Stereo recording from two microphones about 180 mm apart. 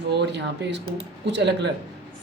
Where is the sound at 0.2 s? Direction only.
70° right (ahead or behind).